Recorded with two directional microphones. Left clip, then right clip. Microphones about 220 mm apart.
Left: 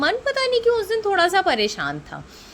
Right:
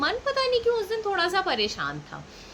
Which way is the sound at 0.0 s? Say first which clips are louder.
Left 4 dB; 35° left (ahead or behind).